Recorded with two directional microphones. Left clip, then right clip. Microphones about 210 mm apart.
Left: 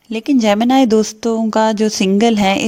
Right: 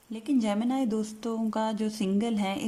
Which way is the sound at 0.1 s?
40° left (ahead or behind).